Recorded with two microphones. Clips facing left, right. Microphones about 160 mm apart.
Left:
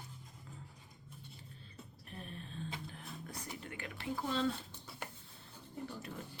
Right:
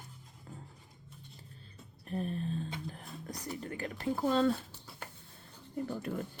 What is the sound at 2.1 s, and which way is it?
Speech, 40° right (ahead or behind).